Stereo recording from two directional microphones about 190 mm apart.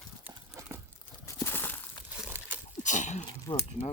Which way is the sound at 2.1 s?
5° right (ahead or behind).